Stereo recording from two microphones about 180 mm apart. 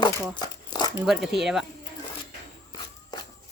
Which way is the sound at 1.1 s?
Centre (ahead or behind).